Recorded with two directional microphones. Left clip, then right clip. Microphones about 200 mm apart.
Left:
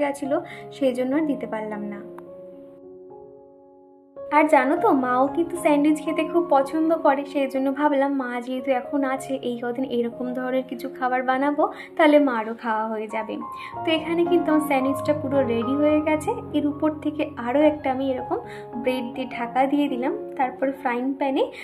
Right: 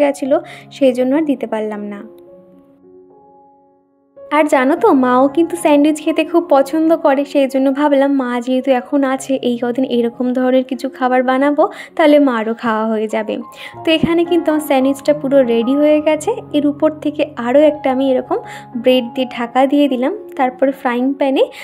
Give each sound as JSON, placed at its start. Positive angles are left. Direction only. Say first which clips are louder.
{"t": 0.0, "sound": "a woman's voice", "louder": "right 10 dB", "side_deg": -45}
{"t": 4.3, "sound": "a woman's voice", "louder": "right 5 dB", "side_deg": -50}